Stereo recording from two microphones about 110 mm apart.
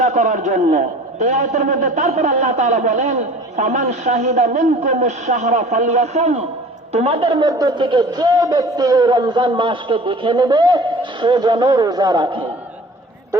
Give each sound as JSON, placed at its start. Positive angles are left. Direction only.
{"t": 0.0, "sound": "speech", "side_deg": -90}
{"t": 6.9, "sound": "speech", "side_deg": -65}